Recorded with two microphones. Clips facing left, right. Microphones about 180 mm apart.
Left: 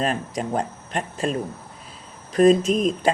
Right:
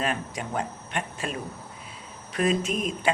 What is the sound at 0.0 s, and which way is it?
Speech, 35° left (ahead or behind).